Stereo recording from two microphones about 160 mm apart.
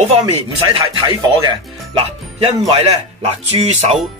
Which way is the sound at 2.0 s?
40° right (ahead or behind).